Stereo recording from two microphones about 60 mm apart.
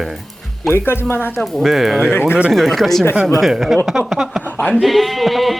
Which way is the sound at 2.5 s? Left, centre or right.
Centre.